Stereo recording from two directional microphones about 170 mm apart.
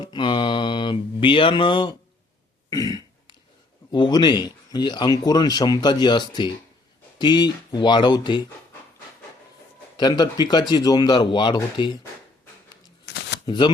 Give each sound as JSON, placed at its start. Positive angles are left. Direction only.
{"t": 0.0, "sound": "speech", "side_deg": 25}
{"t": 2.6, "sound": "throat clearing", "side_deg": 20}
{"t": 3.9, "sound": "speech", "side_deg": 25}
{"t": 10.0, "sound": "speech", "side_deg": 25}
{"t": 13.1, "sound": "shuffling cards", "side_deg": 75}
{"t": 13.4, "sound": "speech", "side_deg": 25}